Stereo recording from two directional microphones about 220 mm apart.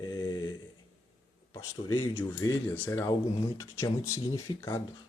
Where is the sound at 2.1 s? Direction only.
10° left (ahead or behind).